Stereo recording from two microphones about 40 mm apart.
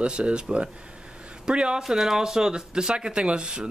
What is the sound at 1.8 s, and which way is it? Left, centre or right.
Speech, centre.